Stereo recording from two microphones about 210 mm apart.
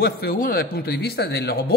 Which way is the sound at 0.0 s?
45° left (ahead or behind).